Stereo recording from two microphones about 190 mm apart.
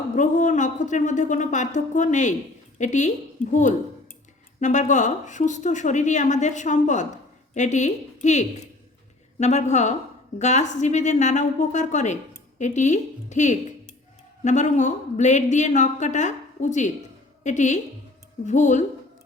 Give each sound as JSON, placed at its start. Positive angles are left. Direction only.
{"t": 0.2, "sound": "a woman's voice", "side_deg": 40}